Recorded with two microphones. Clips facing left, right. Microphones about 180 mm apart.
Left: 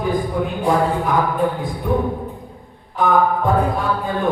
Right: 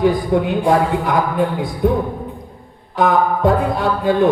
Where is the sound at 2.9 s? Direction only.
75° right (ahead or behind).